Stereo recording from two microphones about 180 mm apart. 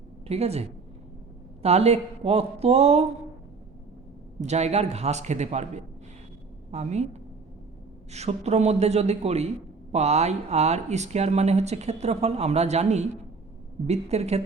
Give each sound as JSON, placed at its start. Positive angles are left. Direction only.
{"t": 0.3, "sound": "speech", "side_deg": -35}
{"t": 4.4, "sound": "speech", "side_deg": -40}